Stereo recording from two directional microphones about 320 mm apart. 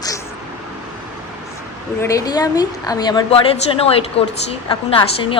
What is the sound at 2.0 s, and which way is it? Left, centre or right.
A woman's voice, centre.